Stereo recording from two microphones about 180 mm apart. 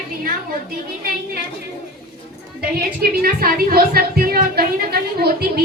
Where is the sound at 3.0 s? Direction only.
55° right (ahead or behind).